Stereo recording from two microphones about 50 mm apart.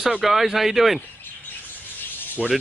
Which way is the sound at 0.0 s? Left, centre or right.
Centre.